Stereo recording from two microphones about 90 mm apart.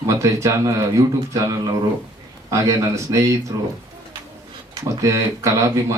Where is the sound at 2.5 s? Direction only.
35° right (ahead or behind).